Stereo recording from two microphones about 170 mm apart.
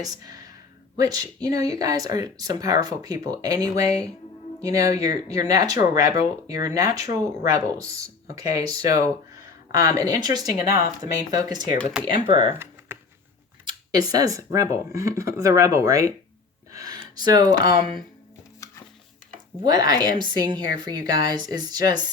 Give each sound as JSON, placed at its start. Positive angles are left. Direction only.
{"t": 0.0, "sound": "speech", "side_deg": -20}
{"t": 12.9, "sound": "a sound", "side_deg": -15}
{"t": 13.7, "sound": "speech", "side_deg": -25}
{"t": 18.6, "sound": "music", "side_deg": 20}
{"t": 19.6, "sound": "speech", "side_deg": -25}